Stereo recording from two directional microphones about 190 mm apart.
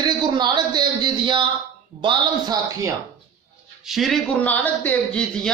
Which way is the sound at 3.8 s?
Centre (ahead or behind).